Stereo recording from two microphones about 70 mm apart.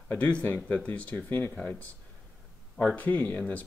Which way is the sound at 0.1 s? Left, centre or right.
Left.